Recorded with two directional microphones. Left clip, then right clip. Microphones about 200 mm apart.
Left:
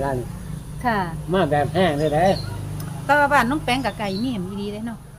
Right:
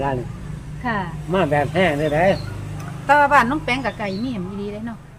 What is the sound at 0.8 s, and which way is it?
Speech, 40° left (ahead or behind).